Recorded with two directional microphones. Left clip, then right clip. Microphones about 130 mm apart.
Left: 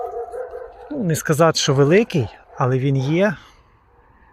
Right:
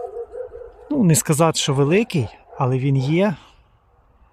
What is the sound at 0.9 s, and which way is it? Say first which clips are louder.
Speech: right 5 dB; 75° right (ahead or behind).